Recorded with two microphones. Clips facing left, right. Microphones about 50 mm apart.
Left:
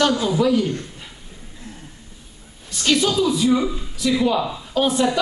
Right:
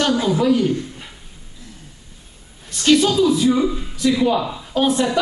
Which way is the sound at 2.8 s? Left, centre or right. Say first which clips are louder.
Right 4 dB; centre.